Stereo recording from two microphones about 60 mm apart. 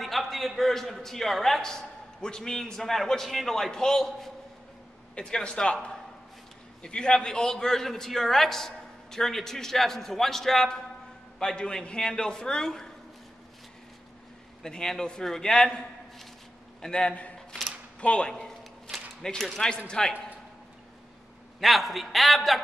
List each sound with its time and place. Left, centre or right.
0.0 s a man's voice: centre
5.1 s a man's voice: centre
14.6 s a man's voice: centre
17.1 s a sound: left
18.0 s a man's voice: centre
21.5 s a man's voice: centre